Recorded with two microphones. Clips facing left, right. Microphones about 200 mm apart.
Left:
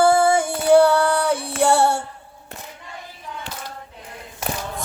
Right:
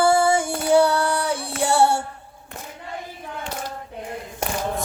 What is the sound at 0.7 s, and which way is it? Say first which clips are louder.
Child singing: left 4 dB; 55° left (ahead or behind).